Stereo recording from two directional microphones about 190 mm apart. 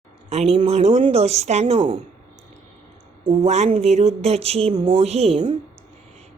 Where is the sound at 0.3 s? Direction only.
35° right (ahead or behind).